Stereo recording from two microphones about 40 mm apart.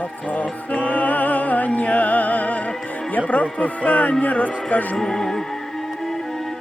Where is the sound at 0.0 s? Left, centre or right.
Left.